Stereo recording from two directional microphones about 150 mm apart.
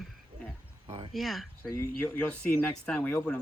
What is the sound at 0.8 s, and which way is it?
Speech, 35° right (ahead or behind).